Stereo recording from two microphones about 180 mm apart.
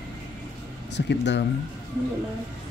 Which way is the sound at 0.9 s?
75° left (ahead or behind).